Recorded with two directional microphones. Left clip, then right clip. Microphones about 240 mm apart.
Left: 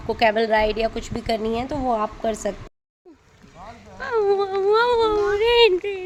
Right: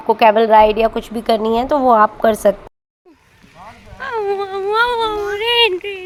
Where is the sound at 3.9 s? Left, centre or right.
Centre.